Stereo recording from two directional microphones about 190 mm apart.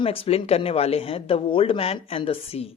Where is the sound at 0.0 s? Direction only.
30° left (ahead or behind).